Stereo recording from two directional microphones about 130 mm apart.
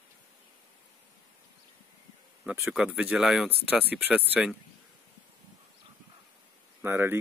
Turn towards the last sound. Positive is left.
turn(degrees=-15)  # may be behind; listen again after turning